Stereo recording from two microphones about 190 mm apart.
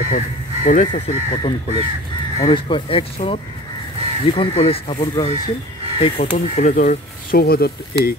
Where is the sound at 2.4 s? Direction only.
25° left (ahead or behind).